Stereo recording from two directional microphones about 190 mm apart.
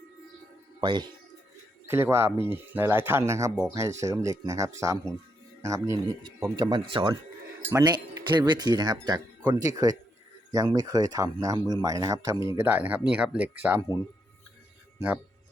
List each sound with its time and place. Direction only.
0.8 s speech: 25° right (ahead or behind)
1.9 s speech: 15° right (ahead or behind)
7.6 s speech: 15° right (ahead or behind)
14.9 s speech: 10° right (ahead or behind)